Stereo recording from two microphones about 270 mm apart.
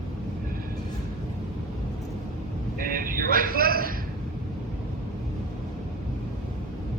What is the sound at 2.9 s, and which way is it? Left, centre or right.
Speech, right.